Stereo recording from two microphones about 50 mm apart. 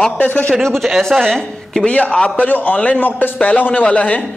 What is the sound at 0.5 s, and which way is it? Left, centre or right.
A man's voice, centre.